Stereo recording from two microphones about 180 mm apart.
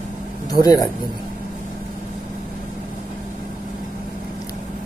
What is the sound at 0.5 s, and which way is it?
Speech, 20° left (ahead or behind).